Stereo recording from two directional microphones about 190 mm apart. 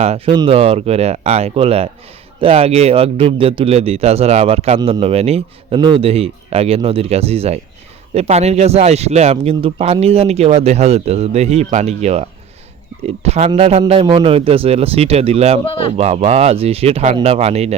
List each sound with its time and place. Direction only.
0.0 s speech: 35° right (ahead or behind)